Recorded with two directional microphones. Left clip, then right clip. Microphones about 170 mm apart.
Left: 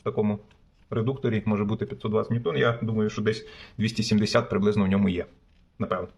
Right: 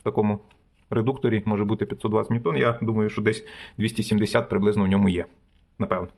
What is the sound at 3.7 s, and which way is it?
Speech, 20° right (ahead or behind).